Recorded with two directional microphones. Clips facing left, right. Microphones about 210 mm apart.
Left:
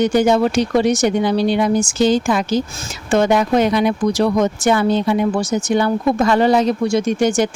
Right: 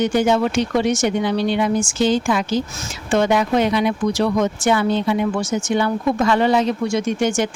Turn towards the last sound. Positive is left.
turn(degrees=40)  # may be behind; listen again after turning